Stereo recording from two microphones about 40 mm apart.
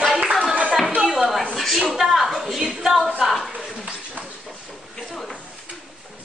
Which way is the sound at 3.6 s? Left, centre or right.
Right.